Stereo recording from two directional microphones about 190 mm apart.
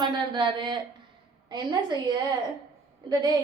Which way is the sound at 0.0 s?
25° right (ahead or behind).